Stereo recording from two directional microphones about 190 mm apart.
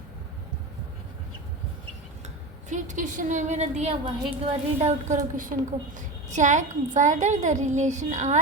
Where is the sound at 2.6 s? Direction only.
40° right (ahead or behind).